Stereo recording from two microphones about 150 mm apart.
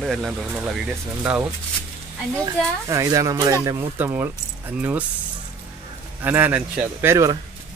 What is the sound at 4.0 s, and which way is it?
A man's voice, 15° right (ahead or behind).